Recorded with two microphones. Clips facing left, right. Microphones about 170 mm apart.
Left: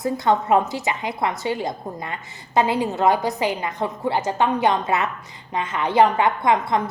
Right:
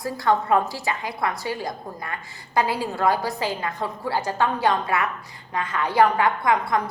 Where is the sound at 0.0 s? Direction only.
20° left (ahead or behind).